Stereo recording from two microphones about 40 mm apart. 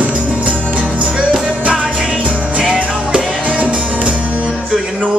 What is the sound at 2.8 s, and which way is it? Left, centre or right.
Music, right.